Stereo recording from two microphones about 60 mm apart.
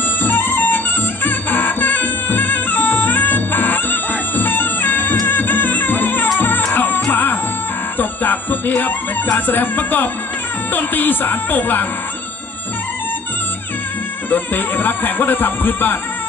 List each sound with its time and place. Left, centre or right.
0.2 s music: left
14.3 s music: left